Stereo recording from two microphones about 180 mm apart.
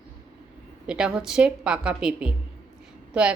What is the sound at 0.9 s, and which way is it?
A woman's voice, 5° right (ahead or behind).